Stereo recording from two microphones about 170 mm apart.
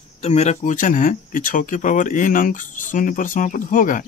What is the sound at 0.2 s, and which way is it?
Speech, 40° left (ahead or behind).